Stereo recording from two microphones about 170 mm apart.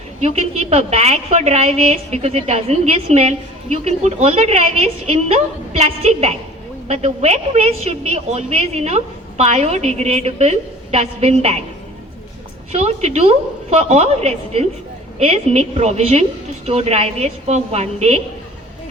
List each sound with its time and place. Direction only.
0.2 s a woman's voice: 35° right (ahead or behind)
12.7 s a woman's voice: 40° right (ahead or behind)